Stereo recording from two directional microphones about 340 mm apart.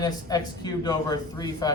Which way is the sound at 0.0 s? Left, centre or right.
Centre.